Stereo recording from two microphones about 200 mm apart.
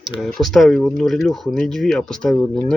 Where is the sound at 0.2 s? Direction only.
Centre (ahead or behind).